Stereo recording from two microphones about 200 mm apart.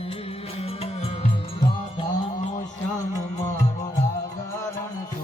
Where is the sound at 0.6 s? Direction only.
30° left (ahead or behind).